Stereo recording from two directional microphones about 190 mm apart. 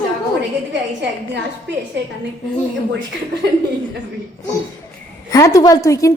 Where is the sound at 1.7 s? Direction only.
65° right (ahead or behind).